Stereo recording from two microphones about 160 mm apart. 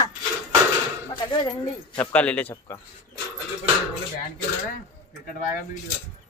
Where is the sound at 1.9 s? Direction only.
10° left (ahead or behind).